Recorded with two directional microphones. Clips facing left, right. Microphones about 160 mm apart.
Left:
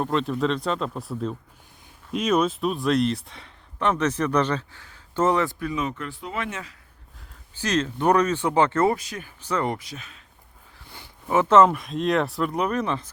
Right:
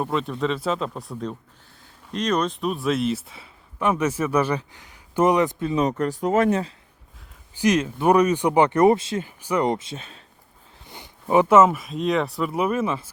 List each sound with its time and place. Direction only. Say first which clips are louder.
0.0 s speech: left 1 dB; 5° right (ahead or behind); by 5.7 s 20° right (ahead or behind)
5.7 s speech: right 7 dB; 40° right (ahead or behind)
7.6 s speech: right 3 dB; 10° right (ahead or behind); by 10.2 s 30° right (ahead or behind)
10.8 s speech: right 4 dB; 20° right (ahead or behind)